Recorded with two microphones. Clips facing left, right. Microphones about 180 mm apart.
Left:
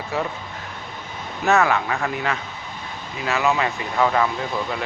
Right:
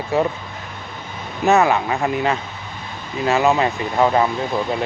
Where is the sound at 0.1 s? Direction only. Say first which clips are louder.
Right 7 dB; 25° right (ahead or behind).